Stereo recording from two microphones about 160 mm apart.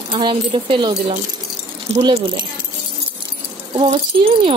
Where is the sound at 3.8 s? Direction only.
30° right (ahead or behind).